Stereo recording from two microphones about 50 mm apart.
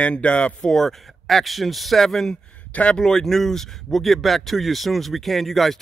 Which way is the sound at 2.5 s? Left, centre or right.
Left.